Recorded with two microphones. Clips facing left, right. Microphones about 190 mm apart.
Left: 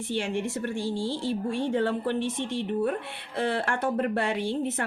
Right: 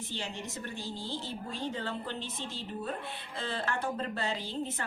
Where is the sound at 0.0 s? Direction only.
75° left (ahead or behind).